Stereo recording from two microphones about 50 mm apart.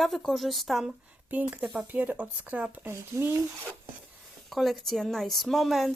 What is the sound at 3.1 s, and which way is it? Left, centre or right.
Speech, right.